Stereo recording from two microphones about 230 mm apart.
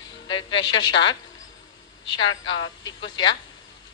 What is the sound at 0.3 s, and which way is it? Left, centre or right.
Speech, centre.